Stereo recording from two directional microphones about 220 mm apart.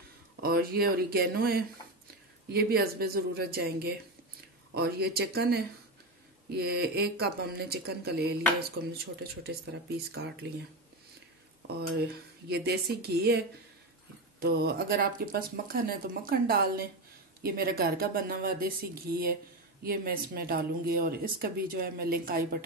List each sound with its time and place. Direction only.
0.4 s speech: 40° right (ahead or behind)
11.9 s speech: 50° right (ahead or behind)